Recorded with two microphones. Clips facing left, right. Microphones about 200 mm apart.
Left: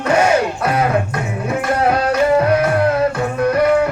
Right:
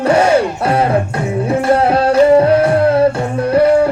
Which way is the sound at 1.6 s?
30° right (ahead or behind).